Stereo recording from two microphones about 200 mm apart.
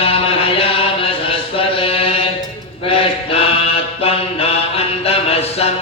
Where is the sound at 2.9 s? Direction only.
25° left (ahead or behind).